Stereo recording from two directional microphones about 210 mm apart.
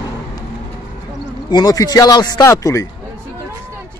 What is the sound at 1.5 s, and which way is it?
Speech, 20° left (ahead or behind).